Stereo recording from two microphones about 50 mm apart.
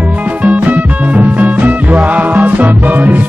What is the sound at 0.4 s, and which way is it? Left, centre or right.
Music, right.